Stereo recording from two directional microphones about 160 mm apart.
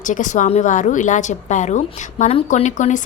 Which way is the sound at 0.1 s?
50° left (ahead or behind).